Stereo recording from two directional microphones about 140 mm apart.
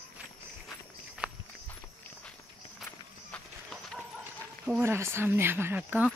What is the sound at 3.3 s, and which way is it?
Clip-clop, 5° left (ahead or behind).